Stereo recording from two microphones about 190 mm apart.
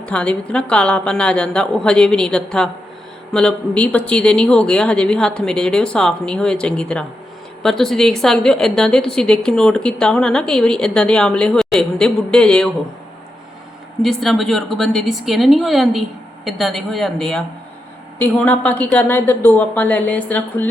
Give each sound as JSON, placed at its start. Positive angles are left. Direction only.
{"t": 0.0, "sound": "a woman's voice", "side_deg": 5}
{"t": 14.0, "sound": "a woman's voice", "side_deg": 0}